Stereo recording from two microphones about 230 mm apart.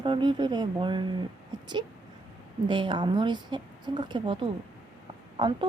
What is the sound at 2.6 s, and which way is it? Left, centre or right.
A woman's voice, right.